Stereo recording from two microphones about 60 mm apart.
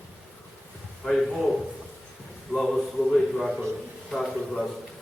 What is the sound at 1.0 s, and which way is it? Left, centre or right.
Speech, centre.